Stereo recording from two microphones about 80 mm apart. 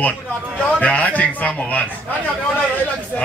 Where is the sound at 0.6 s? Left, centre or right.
Centre.